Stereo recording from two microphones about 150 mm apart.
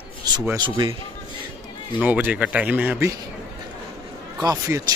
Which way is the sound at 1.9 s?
10° right (ahead or behind).